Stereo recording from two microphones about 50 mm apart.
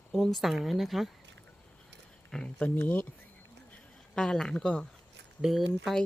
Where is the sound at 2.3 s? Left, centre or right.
Centre.